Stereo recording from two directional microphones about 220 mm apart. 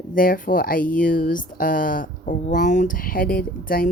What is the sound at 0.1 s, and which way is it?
A woman's voice, 40° left (ahead or behind).